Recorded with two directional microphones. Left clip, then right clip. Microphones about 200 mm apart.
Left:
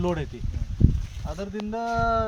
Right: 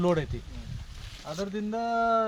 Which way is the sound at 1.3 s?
15° right (ahead or behind).